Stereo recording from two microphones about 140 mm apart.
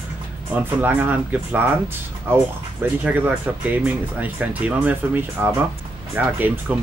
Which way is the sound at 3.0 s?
10° right (ahead or behind).